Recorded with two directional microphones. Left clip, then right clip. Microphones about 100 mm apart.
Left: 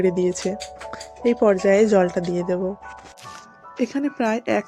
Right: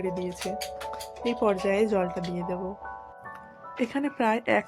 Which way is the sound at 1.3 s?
40° left (ahead or behind).